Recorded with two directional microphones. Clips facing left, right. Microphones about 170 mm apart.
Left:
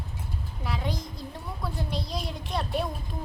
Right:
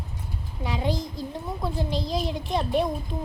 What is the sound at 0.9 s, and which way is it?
A child's voice, centre (ahead or behind).